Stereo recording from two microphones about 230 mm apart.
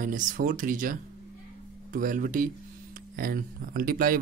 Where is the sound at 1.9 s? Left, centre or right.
Right.